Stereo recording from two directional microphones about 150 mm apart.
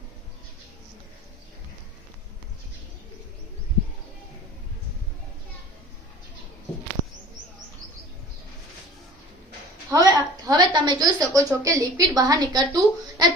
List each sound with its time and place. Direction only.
9.9 s a woman's voice: 25° right (ahead or behind)